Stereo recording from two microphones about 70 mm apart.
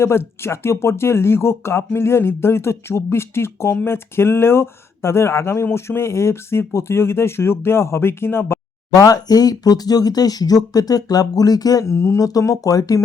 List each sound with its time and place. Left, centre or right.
0.0 s speech: left
9.0 s speech: left
11.9 s speech: left